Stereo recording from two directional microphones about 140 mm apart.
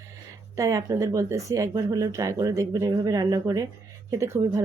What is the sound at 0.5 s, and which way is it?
Speech, 25° right (ahead or behind).